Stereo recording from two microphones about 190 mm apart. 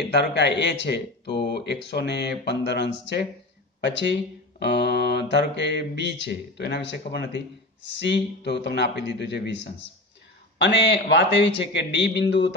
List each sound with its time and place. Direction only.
0.1 s a man's voice: 65° left (ahead or behind)